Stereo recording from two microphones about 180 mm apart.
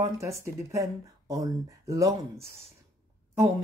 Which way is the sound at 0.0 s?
15° right (ahead or behind).